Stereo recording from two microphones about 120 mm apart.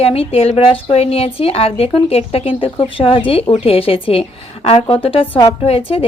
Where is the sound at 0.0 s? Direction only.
55° left (ahead or behind).